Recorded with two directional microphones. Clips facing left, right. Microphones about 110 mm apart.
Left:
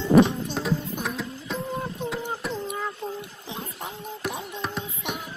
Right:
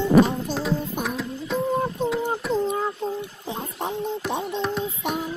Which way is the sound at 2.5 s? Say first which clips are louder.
Right 7 dB; 30° right (ahead or behind).